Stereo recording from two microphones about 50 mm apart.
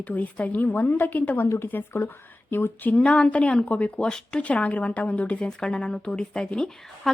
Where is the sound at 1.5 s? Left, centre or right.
Left.